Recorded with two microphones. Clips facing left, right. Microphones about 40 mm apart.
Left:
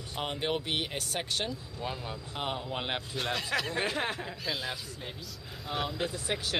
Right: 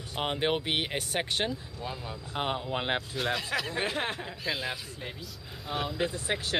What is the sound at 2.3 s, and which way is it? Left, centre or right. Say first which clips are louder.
Speech: right 4 dB; centre.